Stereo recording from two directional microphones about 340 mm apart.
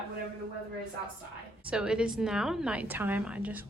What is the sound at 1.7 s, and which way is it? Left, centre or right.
A woman's voice, centre.